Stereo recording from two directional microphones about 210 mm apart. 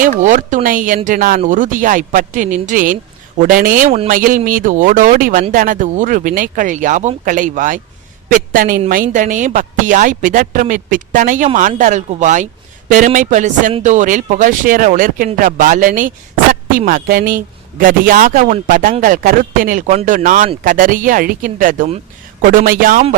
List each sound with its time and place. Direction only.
0.2 s a man's voice: 35° right (ahead or behind)